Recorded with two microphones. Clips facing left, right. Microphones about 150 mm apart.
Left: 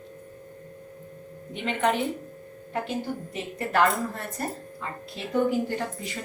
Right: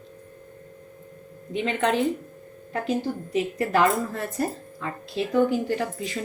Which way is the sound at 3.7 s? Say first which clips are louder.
Left 1 dB; centre (ahead or behind).